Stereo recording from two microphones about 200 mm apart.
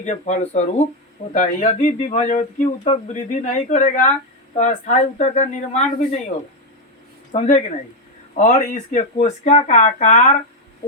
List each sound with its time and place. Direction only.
0.0 s speech: 35° left (ahead or behind)
7.3 s speech: 35° left (ahead or behind)